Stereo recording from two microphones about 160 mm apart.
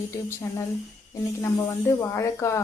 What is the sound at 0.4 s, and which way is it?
Speech, 15° left (ahead or behind).